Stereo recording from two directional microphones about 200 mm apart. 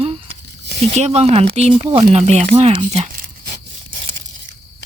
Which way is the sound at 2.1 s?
35° right (ahead or behind).